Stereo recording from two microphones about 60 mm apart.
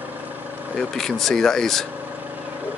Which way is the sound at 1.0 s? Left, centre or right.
Centre.